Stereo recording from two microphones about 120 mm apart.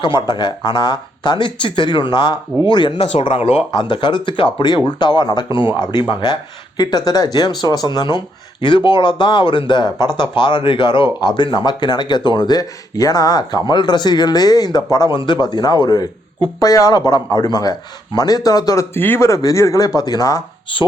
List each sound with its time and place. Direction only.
0.0 s speech: 40° left (ahead or behind)
3.0 s speech: 60° left (ahead or behind)
3.7 s speech: 40° left (ahead or behind)
18.9 s speech: 20° left (ahead or behind)
20.7 s speech: 45° left (ahead or behind)